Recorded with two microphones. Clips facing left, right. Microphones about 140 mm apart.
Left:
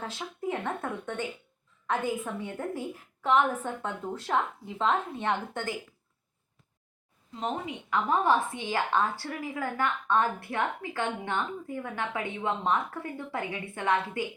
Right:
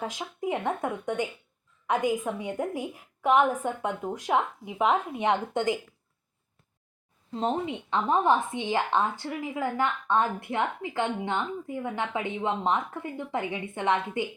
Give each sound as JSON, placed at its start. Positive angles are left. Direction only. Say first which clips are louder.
{"t": 0.0, "sound": "a woman's voice", "louder": "right 2 dB", "side_deg": -15}
{"t": 7.3, "sound": "a woman's voice", "louder": "right 5 dB", "side_deg": -30}